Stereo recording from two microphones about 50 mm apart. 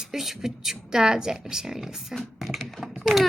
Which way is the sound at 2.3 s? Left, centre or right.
Centre.